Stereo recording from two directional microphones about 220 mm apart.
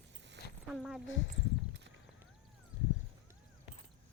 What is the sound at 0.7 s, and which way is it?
Speech, centre (ahead or behind).